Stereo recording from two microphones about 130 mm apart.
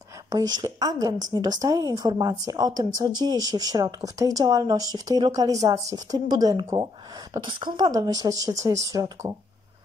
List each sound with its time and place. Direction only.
0.3 s speech: 30° right (ahead or behind)